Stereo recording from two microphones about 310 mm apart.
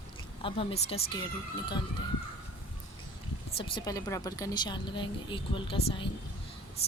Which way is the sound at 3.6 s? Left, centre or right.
Centre.